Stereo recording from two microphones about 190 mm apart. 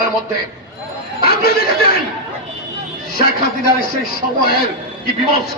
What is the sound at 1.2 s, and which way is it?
Speech, 55° left (ahead or behind).